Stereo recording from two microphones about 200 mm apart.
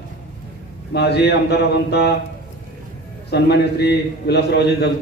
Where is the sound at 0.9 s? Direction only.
55° left (ahead or behind).